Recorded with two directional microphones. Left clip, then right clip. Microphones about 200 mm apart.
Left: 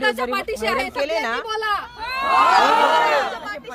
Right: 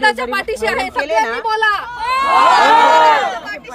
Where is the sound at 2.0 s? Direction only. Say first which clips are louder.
Right 9 dB; 45° right (ahead or behind).